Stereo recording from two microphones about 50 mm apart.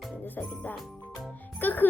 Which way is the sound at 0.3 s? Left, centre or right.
Left.